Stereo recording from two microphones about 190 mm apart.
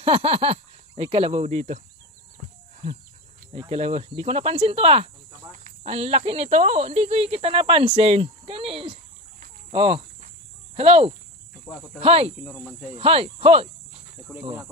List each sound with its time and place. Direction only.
0.0 s speech: 30° right (ahead or behind)
3.5 s speech: 30° right (ahead or behind)
9.7 s cricket: 30° right (ahead or behind)
10.8 s speech: 30° right (ahead or behind)
12.4 s speech: 10° left (ahead or behind)
12.9 s speech: 30° right (ahead or behind)
14.3 s cricket: 5° right (ahead or behind)